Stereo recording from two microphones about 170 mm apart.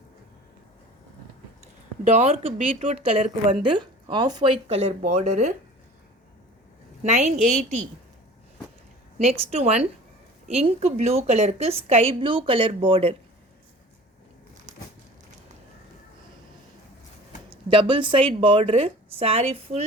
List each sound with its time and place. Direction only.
2.4 s a woman's voice: 45° right (ahead or behind)
7.0 s a woman's voice: 40° right (ahead or behind)
9.5 s a woman's voice: 35° right (ahead or behind)
17.7 s a woman's voice: 30° right (ahead or behind)